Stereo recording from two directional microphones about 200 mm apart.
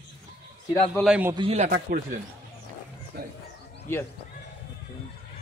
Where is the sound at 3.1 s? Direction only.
50° right (ahead or behind).